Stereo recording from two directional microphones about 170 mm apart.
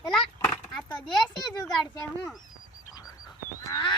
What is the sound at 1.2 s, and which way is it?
A child's voice, 25° left (ahead or behind).